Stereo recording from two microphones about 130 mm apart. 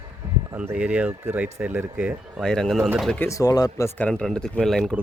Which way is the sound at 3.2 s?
25° left (ahead or behind).